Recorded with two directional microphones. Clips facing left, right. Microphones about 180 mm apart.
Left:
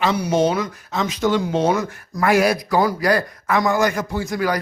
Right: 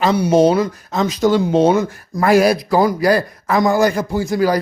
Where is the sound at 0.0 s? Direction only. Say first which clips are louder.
Right 5 dB; 30° right (ahead or behind).